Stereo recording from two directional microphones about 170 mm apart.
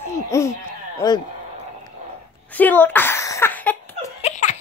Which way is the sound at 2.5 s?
10° left (ahead or behind).